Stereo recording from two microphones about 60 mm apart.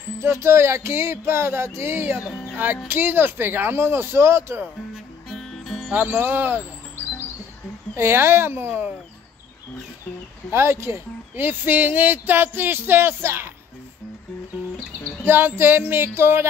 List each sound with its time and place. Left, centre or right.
0.2 s music: right
2.9 s speech: right
4.9 s music: centre
6.2 s speech: right
7.9 s music: right
10.5 s speech: right
15.2 s speech: right